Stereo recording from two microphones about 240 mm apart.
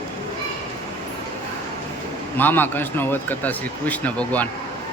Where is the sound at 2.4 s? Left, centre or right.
Centre.